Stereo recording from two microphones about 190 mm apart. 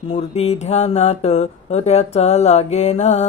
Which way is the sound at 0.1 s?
35° left (ahead or behind).